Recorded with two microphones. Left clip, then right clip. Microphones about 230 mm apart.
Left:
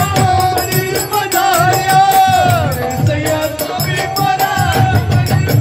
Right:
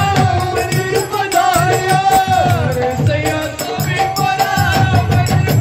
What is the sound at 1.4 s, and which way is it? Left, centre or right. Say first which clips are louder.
Music: left 2 dB; left.